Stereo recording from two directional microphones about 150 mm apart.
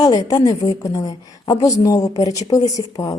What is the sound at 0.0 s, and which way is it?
A woman's voice, 25° left (ahead or behind).